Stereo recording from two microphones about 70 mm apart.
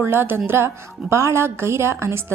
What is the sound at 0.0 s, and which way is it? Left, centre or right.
A woman's voice, right.